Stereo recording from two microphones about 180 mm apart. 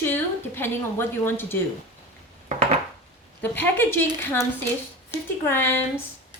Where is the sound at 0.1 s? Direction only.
10° left (ahead or behind).